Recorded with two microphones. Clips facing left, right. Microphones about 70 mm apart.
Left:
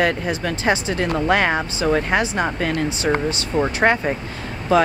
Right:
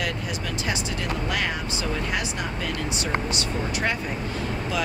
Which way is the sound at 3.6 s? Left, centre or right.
Left.